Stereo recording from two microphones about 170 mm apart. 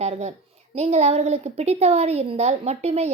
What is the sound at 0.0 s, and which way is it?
A woman's voice, 40° right (ahead or behind).